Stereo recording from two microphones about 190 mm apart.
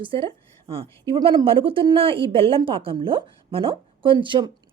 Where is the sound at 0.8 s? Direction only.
15° left (ahead or behind).